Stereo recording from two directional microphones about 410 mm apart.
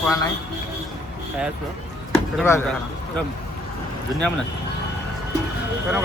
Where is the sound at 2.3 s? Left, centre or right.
Centre.